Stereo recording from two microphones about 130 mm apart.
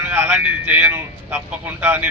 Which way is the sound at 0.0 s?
15° right (ahead or behind).